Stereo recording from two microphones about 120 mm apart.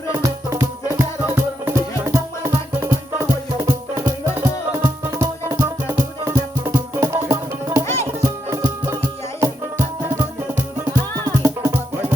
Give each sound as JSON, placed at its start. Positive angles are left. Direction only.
{"t": 0.2, "sound": "music", "side_deg": -25}
{"t": 4.4, "sound": "music", "side_deg": -20}
{"t": 11.4, "sound": "music", "side_deg": -25}